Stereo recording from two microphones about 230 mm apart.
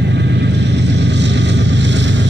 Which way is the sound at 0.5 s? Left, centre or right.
Right.